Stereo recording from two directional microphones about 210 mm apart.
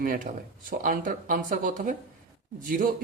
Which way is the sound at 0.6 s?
40° right (ahead or behind).